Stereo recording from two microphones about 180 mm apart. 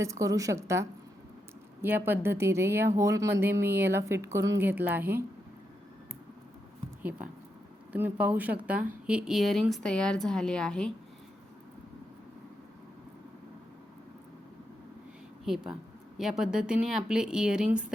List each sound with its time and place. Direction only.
0.0 s speech: 20° right (ahead or behind)
7.9 s a woman's voice: 10° right (ahead or behind)
15.4 s a woman's voice: 5° right (ahead or behind)